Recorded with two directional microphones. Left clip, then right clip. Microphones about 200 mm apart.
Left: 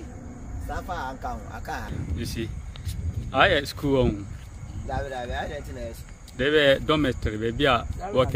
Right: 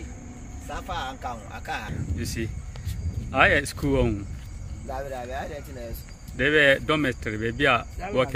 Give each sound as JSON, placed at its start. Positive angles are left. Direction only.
{"t": 0.7, "sound": "speech", "side_deg": 30}
{"t": 2.0, "sound": "speech", "side_deg": 10}
{"t": 4.8, "sound": "speech", "side_deg": -35}
{"t": 6.3, "sound": "speech", "side_deg": 15}